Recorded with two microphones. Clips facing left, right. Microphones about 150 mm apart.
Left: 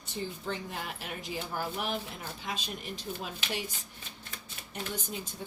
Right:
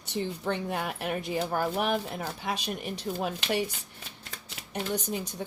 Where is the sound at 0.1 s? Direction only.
65° right (ahead or behind).